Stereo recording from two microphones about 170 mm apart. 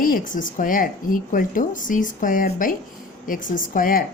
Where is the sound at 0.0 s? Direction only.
55° left (ahead or behind).